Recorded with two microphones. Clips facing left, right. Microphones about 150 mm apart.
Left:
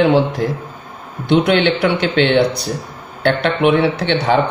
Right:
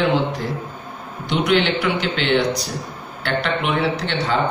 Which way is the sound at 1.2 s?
65° left (ahead or behind).